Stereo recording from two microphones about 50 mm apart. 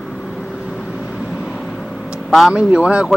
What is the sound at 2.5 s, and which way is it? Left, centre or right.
Speech, centre.